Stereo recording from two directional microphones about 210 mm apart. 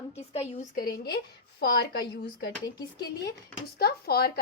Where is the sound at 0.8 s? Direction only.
45° left (ahead or behind).